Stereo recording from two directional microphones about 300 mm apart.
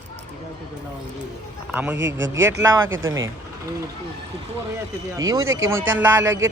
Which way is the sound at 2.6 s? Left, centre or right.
Centre.